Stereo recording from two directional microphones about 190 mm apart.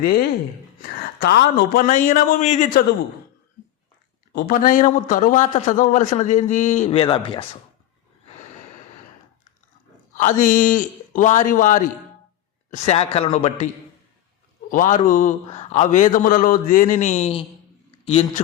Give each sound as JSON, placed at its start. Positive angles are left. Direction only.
{"t": 0.0, "sound": "a man's voice", "side_deg": 55}
{"t": 4.3, "sound": "a man's voice", "side_deg": 50}
{"t": 6.9, "sound": "speech", "side_deg": 25}
{"t": 10.2, "sound": "a man's voice", "side_deg": 40}
{"t": 14.7, "sound": "a man's voice", "side_deg": 45}